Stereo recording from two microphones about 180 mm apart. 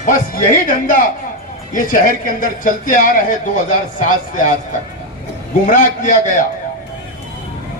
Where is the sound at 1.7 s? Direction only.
50° left (ahead or behind).